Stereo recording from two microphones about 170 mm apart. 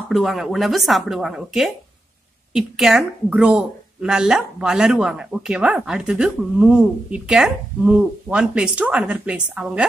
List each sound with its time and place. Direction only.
0.1 s a woman's voice: centre (ahead or behind)